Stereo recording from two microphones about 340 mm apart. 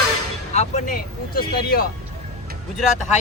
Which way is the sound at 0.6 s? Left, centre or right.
Left.